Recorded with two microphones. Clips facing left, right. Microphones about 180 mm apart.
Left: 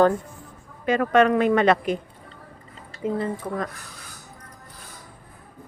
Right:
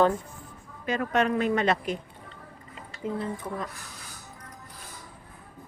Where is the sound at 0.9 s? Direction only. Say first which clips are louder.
Left 7 dB; 65° left (ahead or behind).